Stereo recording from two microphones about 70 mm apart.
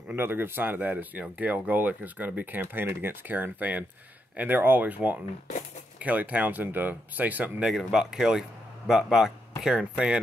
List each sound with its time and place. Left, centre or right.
0.1 s speech: right
7.6 s speech: centre